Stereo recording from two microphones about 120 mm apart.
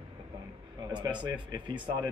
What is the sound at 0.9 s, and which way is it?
A man's voice, 40° right (ahead or behind).